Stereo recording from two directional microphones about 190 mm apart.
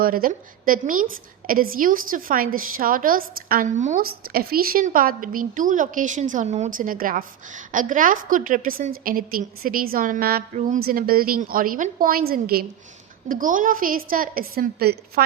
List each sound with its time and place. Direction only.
0.0 s a woman's voice: 50° right (ahead or behind)